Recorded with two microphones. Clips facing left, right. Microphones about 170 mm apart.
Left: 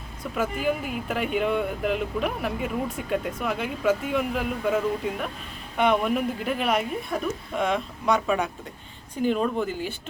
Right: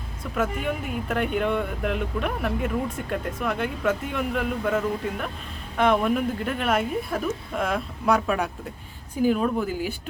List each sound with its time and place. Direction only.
0.3 s a woman's voice: 5° left (ahead or behind)